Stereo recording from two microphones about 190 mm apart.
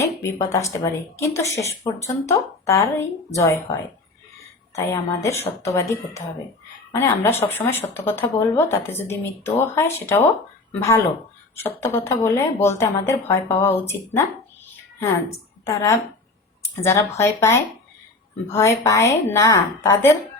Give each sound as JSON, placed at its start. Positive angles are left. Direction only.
{"t": 0.0, "sound": "a woman's voice", "side_deg": 15}